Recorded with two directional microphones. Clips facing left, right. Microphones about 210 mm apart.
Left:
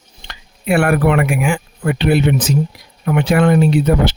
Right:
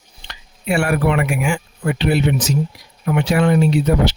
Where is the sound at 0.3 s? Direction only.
55° left (ahead or behind).